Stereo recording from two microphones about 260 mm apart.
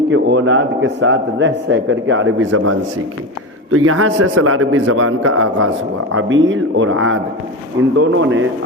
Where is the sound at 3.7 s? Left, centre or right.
Right.